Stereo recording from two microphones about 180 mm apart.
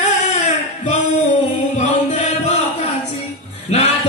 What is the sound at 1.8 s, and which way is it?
Music, 40° left (ahead or behind).